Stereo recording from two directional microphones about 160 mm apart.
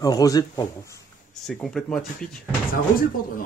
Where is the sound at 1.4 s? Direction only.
Centre (ahead or behind).